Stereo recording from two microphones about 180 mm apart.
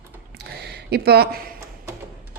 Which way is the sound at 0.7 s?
65° right (ahead or behind).